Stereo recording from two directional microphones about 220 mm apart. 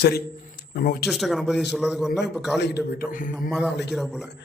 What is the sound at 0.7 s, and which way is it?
Speech, 45° left (ahead or behind).